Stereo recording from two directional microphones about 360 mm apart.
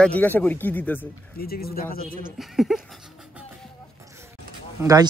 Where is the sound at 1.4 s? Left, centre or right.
Left.